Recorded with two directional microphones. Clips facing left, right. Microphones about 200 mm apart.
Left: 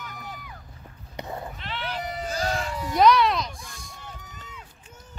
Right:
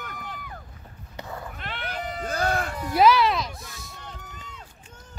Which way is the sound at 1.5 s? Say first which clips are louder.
Left 1 dB; 50° right (ahead or behind).